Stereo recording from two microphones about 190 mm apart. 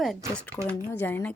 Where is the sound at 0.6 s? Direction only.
10° left (ahead or behind).